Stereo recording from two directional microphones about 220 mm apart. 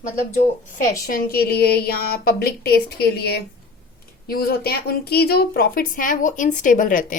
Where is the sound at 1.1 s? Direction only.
40° left (ahead or behind).